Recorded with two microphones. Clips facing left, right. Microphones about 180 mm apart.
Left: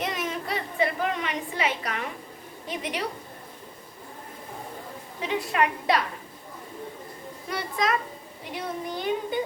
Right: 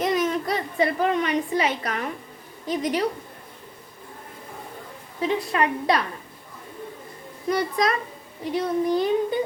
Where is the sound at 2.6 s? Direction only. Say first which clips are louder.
Right 8 dB; 40° right (ahead or behind).